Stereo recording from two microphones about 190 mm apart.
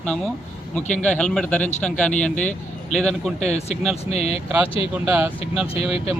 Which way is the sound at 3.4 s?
35° left (ahead or behind).